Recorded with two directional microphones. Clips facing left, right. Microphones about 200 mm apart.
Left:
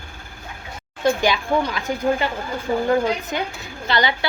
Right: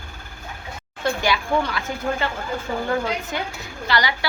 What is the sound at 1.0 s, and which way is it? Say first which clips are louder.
Speech: left 4 dB; 20° left (ahead or behind).